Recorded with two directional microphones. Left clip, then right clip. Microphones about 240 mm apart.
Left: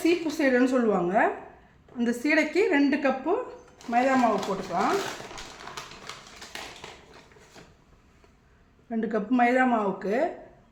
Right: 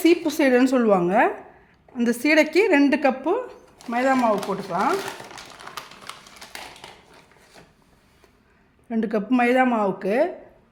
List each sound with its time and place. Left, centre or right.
0.0 s speech: right
5.7 s a sound: centre
8.9 s speech: right